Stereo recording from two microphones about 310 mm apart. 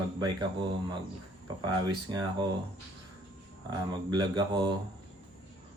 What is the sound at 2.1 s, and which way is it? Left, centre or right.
Speech, centre.